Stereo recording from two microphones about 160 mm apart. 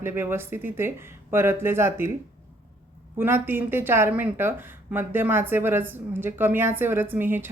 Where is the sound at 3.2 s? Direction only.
15° right (ahead or behind).